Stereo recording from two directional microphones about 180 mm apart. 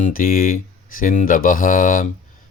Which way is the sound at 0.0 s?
50° left (ahead or behind).